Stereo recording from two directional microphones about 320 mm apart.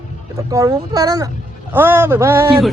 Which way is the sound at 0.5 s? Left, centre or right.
Centre.